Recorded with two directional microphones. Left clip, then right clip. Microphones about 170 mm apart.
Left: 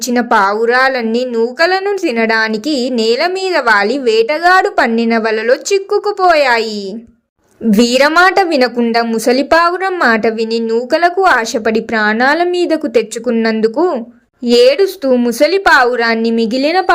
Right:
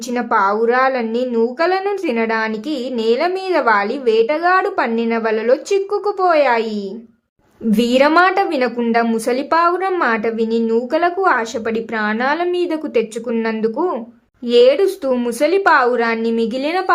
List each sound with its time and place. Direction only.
0.1 s a woman's voice: 25° left (ahead or behind)
7.7 s a woman's voice: 25° left (ahead or behind)